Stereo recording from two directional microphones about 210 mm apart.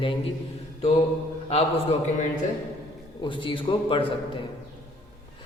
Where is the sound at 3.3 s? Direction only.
25° left (ahead or behind).